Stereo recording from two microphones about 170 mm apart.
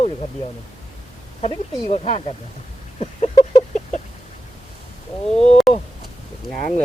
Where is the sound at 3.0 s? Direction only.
30° left (ahead or behind).